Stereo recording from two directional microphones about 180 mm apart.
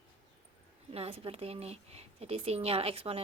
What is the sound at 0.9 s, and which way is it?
A woman's voice, 35° right (ahead or behind).